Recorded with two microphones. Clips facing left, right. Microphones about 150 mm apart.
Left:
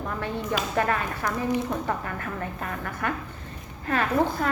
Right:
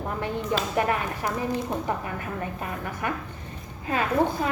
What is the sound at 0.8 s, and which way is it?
A woman's voice, 20° right (ahead or behind).